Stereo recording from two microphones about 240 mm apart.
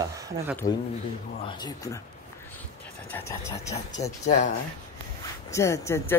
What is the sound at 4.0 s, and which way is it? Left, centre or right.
Speech, left.